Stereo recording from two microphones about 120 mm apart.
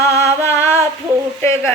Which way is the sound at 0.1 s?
20° left (ahead or behind).